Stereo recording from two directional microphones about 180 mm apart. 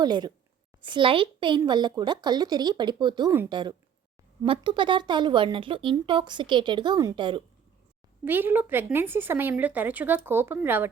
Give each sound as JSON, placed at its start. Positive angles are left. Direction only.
{"t": 0.0, "sound": "speech", "side_deg": -25}
{"t": 8.2, "sound": "speech", "side_deg": -10}